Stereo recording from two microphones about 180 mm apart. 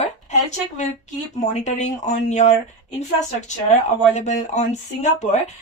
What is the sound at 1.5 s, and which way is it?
Speech, 40° left (ahead or behind).